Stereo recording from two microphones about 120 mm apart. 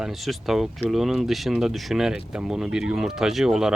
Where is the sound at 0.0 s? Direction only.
Centre (ahead or behind).